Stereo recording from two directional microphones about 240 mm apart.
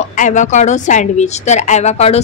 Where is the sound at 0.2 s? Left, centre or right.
Left.